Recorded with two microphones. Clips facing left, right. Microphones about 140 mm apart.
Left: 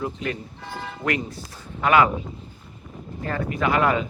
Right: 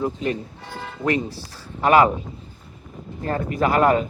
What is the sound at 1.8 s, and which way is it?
Speech, 40° right (ahead or behind).